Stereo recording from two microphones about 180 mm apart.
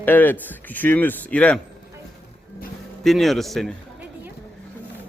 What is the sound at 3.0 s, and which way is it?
Speech, centre (ahead or behind).